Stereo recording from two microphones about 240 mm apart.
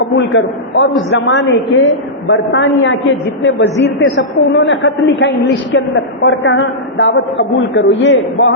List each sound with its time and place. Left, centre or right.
0.0 s a man's voice: left